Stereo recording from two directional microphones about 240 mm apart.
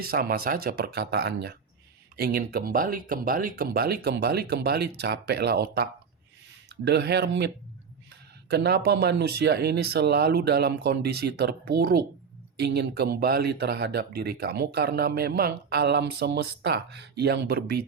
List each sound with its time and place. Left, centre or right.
0.0 s speech: right